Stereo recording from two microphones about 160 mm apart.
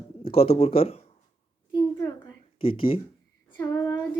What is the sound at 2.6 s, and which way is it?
Speech, 35° left (ahead or behind).